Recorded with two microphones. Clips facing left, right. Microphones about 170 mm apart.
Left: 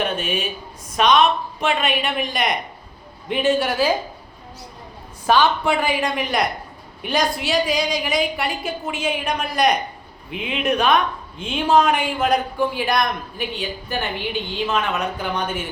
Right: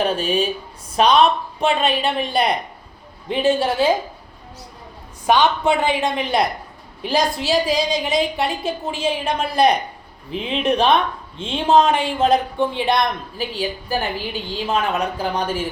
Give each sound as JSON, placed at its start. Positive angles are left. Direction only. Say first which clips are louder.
{"t": 0.0, "sound": "a woman's voice", "louder": "right 4 dB", "side_deg": -30}
{"t": 5.2, "sound": "a woman's voice", "louder": "right 1 dB", "side_deg": -20}
{"t": 14.7, "sound": "a woman's voice", "louder": "right 4 dB", "side_deg": -30}